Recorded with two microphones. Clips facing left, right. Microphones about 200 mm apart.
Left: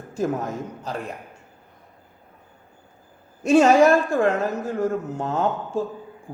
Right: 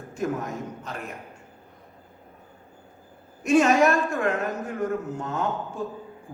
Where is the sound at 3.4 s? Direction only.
30° left (ahead or behind).